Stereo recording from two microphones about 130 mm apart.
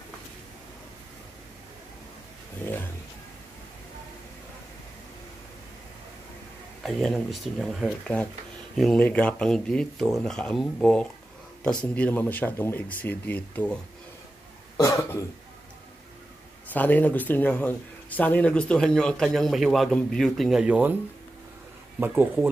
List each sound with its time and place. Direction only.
6.8 s speech: centre (ahead or behind)
14.8 s cough: 25° left (ahead or behind)
16.7 s speech: 15° left (ahead or behind); by 20.9 s 10° right (ahead or behind)
22.0 s speech: 15° right (ahead or behind)